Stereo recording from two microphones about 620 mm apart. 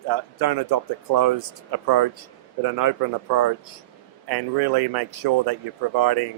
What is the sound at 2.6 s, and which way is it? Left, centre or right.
Speech, right.